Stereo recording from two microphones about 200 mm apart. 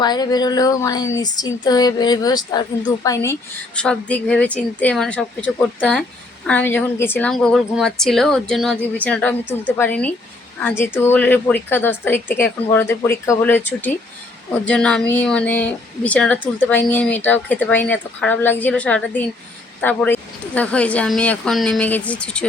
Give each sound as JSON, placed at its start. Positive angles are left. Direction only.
{"t": 0.0, "sound": "speech", "side_deg": 20}
{"t": 3.8, "sound": "a woman's voice", "side_deg": 5}
{"t": 14.6, "sound": "a woman's voice", "side_deg": 5}